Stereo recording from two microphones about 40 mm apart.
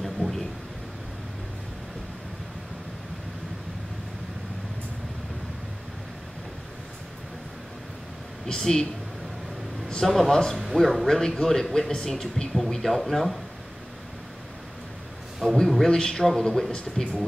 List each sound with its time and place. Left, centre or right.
0.0 s a sound: centre
8.5 s speech: centre
10.0 s speech: centre
10.3 s speech: centre
10.6 s speech: centre
11.1 s speech: centre
15.4 s a man's voice: centre